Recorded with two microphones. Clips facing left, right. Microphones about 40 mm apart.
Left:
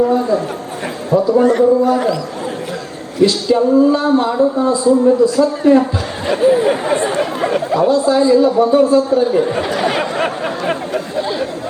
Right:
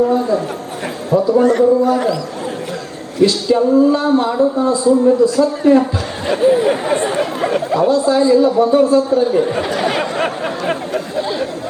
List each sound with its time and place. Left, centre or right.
0.0 s a sound: centre
1.1 s a man's voice: centre
3.5 s speech: centre
4.9 s a man's voice: centre
7.9 s a man's voice: centre
9.2 s a sound: centre